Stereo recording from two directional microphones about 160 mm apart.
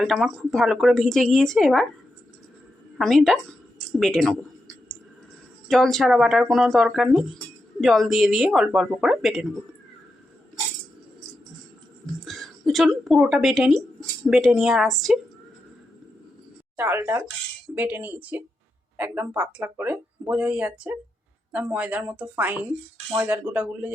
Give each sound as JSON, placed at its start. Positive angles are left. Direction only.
{"t": 0.0, "sound": "speech", "side_deg": 0}
{"t": 3.0, "sound": "speech", "side_deg": 0}
{"t": 5.6, "sound": "speech", "side_deg": 0}
{"t": 12.2, "sound": "a woman's voice", "side_deg": 0}
{"t": 16.7, "sound": "speech", "side_deg": -15}